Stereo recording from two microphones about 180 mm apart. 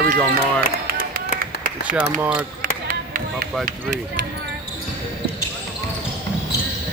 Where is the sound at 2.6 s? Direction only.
50° right (ahead or behind).